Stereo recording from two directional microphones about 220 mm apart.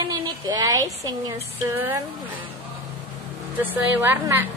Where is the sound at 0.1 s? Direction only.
15° right (ahead or behind).